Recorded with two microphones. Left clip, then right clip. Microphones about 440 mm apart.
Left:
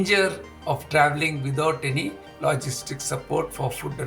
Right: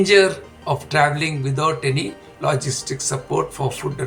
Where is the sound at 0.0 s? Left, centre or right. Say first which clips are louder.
Right 7 dB; left.